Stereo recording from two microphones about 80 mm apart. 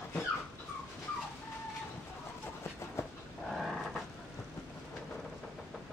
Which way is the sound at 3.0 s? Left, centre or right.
Left.